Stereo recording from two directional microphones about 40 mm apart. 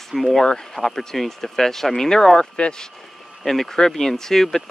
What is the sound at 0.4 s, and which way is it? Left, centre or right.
Speech, centre.